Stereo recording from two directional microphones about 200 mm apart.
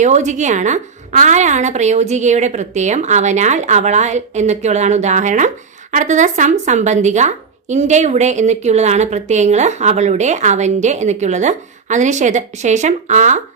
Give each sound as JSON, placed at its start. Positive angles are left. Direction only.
{"t": 0.0, "sound": "speech", "side_deg": -35}